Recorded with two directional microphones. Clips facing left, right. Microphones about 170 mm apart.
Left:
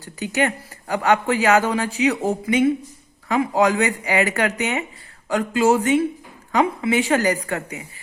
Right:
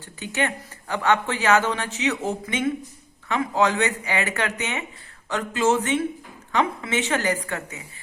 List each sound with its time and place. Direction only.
0.0 s speech: 40° left (ahead or behind)